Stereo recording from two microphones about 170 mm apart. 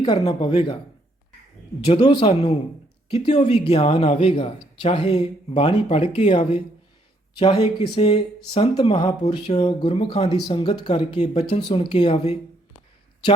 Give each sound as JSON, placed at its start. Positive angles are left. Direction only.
{"t": 0.0, "sound": "speech", "side_deg": 30}
{"t": 1.8, "sound": "speech", "side_deg": 30}